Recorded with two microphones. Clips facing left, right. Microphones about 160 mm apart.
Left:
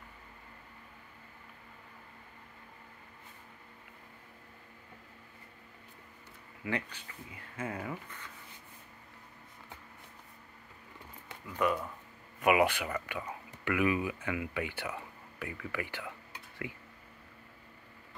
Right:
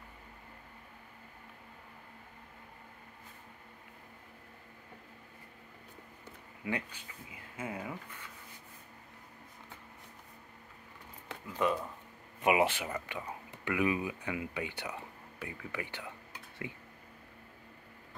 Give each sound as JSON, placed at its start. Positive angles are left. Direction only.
{"t": 6.6, "sound": "speech", "side_deg": -15}
{"t": 11.5, "sound": "speech", "side_deg": -20}